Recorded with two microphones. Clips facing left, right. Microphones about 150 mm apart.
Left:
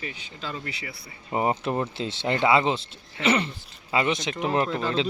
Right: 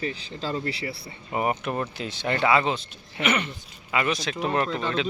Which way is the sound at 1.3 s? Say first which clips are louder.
Left 1 dB; 25° left (ahead or behind).